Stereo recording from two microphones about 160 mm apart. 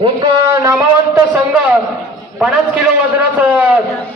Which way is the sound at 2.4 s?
5° right (ahead or behind).